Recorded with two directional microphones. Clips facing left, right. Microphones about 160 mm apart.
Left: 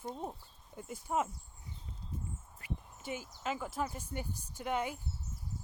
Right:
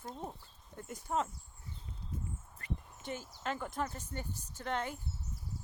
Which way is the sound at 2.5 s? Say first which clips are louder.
Even; 5° left (ahead or behind).